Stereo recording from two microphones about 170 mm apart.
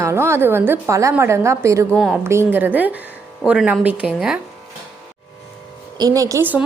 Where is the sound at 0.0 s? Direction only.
15° right (ahead or behind).